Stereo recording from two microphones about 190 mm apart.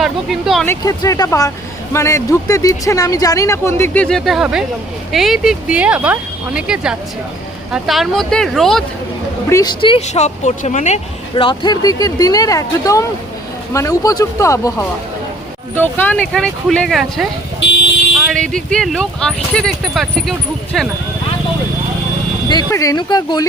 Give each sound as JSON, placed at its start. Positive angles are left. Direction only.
{"t": 0.0, "sound": "speech", "side_deg": 0}
{"t": 0.7, "sound": "speech", "side_deg": 20}
{"t": 9.5, "sound": "speech", "side_deg": 20}
{"t": 22.4, "sound": "speech", "side_deg": 20}